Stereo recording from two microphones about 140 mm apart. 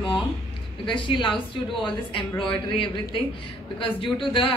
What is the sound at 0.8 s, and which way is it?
A woman's voice, 35° left (ahead or behind).